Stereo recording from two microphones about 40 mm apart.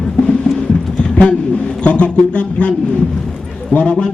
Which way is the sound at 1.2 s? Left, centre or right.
Left.